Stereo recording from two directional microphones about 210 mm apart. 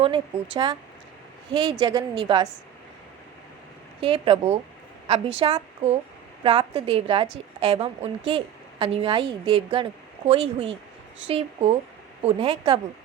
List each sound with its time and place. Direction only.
0.5 s a woman's voice: 20° right (ahead or behind)
1.8 s a woman's voice: 20° right (ahead or behind)
4.0 s a woman's voice: 25° right (ahead or behind)